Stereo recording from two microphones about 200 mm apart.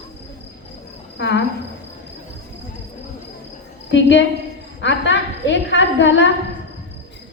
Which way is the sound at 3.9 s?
65° left (ahead or behind).